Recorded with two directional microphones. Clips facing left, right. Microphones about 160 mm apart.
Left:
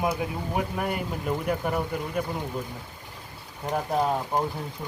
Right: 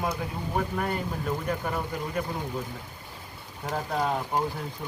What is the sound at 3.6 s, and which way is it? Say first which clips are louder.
Speech: left 3 dB; 20° left (ahead or behind).